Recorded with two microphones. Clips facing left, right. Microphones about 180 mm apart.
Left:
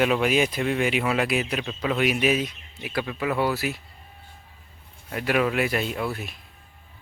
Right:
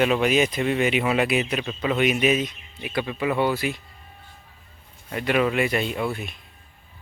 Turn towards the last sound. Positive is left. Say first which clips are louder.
# right 2 dB
turn(degrees=0)  # may be behind; listen again after turning